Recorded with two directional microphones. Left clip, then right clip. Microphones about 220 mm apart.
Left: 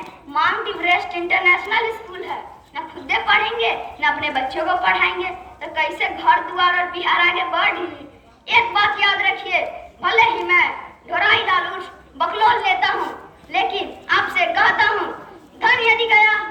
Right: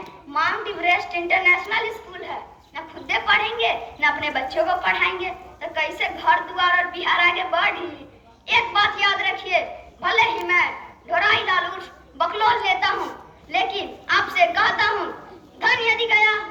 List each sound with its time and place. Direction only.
0.3 s a woman's voice: 30° right (ahead or behind)